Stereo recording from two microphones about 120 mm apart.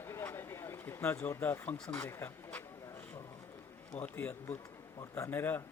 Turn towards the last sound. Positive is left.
turn(degrees=15)  # may be behind; listen again after turning